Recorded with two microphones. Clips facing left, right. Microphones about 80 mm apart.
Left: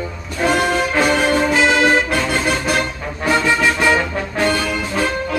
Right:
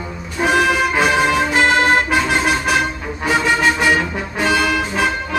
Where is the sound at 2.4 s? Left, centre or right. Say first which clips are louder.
Right 1 dB; centre.